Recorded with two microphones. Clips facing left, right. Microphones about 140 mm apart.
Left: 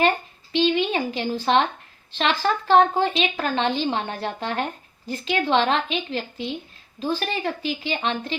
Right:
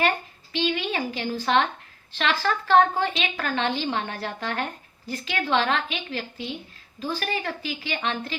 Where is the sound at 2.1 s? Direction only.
20° left (ahead or behind).